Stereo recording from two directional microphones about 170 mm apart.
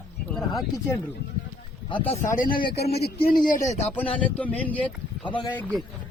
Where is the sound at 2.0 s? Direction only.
40° left (ahead or behind).